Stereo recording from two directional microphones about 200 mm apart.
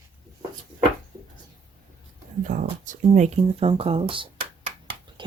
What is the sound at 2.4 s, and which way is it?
Speech, 40° right (ahead or behind).